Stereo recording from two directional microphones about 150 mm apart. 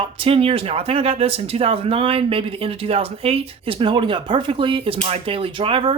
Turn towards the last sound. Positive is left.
turn(degrees=-35)  # may be behind; listen again after turning